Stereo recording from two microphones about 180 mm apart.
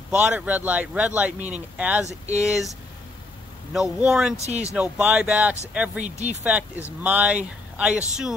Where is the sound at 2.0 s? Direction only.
40° right (ahead or behind).